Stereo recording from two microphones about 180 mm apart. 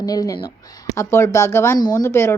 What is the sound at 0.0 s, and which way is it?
A woman's voice, 20° left (ahead or behind).